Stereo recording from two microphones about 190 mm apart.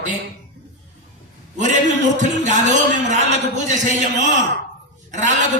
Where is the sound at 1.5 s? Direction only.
40° right (ahead or behind).